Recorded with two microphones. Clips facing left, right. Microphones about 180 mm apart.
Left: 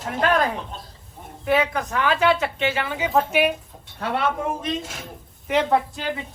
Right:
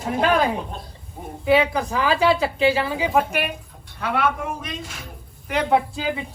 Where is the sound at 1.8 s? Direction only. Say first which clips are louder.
Right 1 dB; 30° right (ahead or behind).